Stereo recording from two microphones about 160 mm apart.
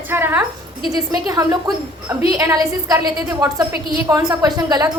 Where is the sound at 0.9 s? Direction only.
25° right (ahead or behind).